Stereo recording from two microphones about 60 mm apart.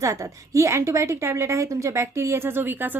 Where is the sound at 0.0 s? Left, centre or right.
Right.